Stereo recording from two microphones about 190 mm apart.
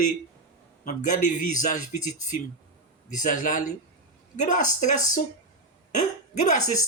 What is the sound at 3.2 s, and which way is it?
A man's voice, 45° left (ahead or behind).